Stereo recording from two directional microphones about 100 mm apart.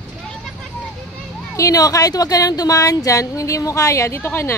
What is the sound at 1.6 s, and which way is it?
A woman's voice, 35° left (ahead or behind).